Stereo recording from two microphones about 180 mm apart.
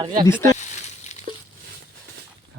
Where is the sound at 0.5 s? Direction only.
40° left (ahead or behind).